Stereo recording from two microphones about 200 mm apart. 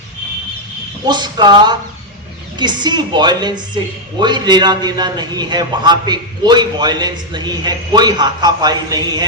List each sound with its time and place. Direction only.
1.0 s a man's voice: 20° right (ahead or behind)